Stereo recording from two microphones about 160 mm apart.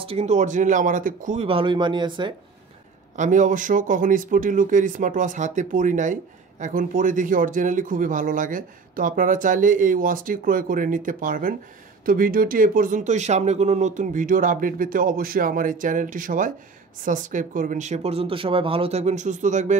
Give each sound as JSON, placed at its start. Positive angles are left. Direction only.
{"t": 0.0, "sound": "speech", "side_deg": -40}
{"t": 1.5, "sound": "speech", "side_deg": -30}
{"t": 3.2, "sound": "speech", "side_deg": -55}